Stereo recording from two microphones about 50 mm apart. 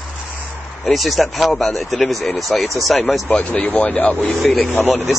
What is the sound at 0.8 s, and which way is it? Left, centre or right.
Speech, centre.